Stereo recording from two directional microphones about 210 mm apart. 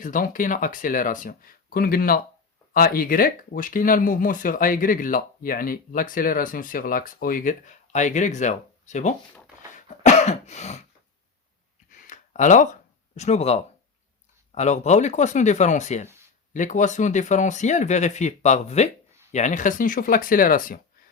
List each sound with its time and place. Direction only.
0.0 s speech: 40° left (ahead or behind)
9.7 s cough: 35° left (ahead or behind)
11.9 s a sound: 35° left (ahead or behind)
14.5 s speech: 35° left (ahead or behind)